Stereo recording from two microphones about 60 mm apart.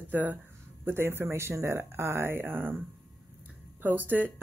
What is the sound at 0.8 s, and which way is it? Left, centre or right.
Speech, right.